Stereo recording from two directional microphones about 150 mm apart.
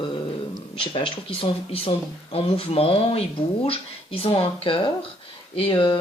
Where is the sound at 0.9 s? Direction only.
35° left (ahead or behind).